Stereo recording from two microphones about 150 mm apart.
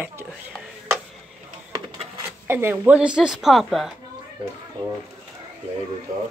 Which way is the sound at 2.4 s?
15° right (ahead or behind).